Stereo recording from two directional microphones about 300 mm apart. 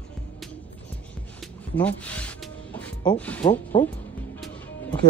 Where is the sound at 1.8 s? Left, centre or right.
Centre.